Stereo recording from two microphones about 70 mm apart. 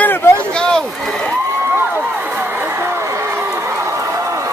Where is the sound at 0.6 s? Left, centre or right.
Centre.